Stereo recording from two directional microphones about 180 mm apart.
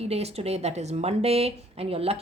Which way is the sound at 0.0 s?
35° right (ahead or behind).